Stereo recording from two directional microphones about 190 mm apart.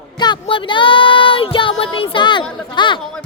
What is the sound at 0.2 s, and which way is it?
A woman's voice, 25° left (ahead or behind).